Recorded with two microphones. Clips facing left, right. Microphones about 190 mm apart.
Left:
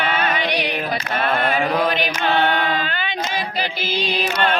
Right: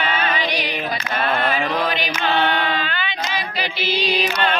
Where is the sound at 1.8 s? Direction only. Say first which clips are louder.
Left 2 dB; 50° left (ahead or behind).